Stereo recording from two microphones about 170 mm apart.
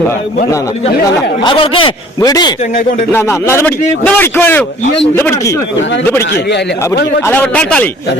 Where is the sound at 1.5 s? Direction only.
30° left (ahead or behind).